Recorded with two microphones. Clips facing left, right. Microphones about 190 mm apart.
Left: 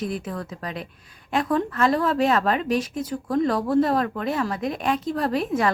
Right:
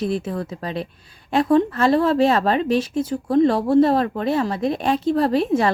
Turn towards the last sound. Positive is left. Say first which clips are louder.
# right 4 dB
turn(degrees=-30)  # may be behind; listen again after turning